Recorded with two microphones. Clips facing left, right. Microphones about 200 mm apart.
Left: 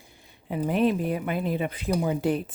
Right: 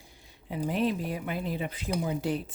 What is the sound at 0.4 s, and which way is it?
Speech, 55° left (ahead or behind).